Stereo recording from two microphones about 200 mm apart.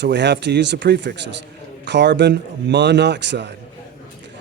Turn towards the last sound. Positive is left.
turn(degrees=-60)  # may be behind; listen again after turning